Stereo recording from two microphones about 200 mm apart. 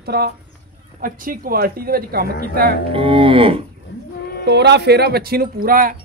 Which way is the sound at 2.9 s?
25° right (ahead or behind).